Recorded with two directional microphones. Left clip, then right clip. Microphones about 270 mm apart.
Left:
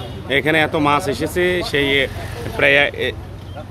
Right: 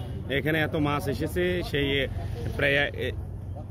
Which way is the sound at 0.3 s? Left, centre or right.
Centre.